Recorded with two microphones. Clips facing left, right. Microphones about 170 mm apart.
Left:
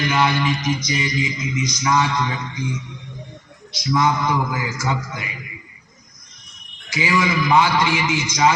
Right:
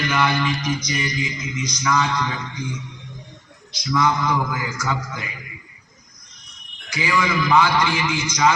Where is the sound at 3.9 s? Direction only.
25° left (ahead or behind).